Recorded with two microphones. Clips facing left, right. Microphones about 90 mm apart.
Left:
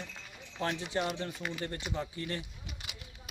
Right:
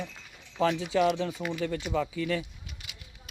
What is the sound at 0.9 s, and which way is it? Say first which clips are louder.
Speech: right 9 dB; 90° right.